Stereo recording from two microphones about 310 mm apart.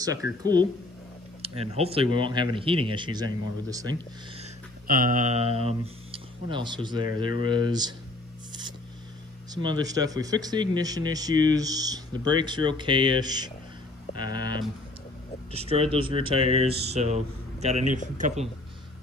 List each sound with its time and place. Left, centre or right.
0.0 s speech: centre
4.8 s speech: right
9.5 s speech: centre